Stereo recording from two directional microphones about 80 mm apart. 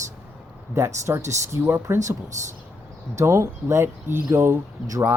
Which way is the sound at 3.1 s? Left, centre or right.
Right.